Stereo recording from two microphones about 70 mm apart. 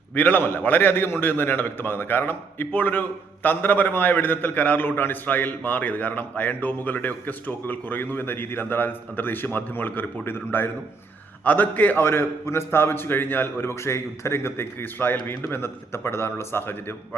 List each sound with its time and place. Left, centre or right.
0.1 s a man's voice: left